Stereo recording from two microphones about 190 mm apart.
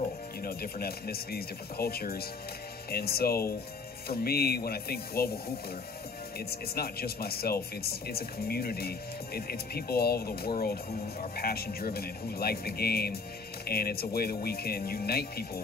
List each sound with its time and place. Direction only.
0.4 s speech: 50° left (ahead or behind)